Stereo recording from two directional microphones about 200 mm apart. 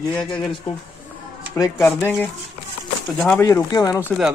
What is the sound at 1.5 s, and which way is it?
Speech, 20° left (ahead or behind).